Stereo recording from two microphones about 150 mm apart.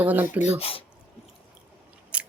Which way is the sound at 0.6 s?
40° left (ahead or behind).